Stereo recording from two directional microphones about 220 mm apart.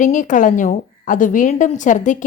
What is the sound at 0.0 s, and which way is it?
A woman's voice, 35° left (ahead or behind).